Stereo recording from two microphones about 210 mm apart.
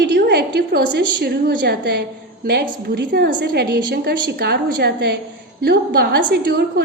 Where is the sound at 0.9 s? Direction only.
50° right (ahead or behind).